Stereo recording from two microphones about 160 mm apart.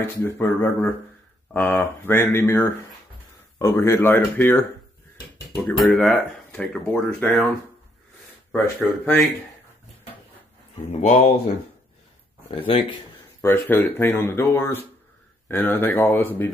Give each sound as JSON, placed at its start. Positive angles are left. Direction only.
{"t": 0.0, "sound": "speech", "side_deg": 15}
{"t": 5.7, "sound": "speech", "side_deg": 5}
{"t": 8.5, "sound": "speech", "side_deg": 5}
{"t": 10.9, "sound": "speech", "side_deg": 45}
{"t": 12.4, "sound": "speech", "side_deg": 30}
{"t": 13.4, "sound": "speech", "side_deg": 15}